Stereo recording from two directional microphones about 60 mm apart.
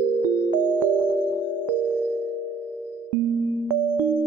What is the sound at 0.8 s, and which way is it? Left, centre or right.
Music, right.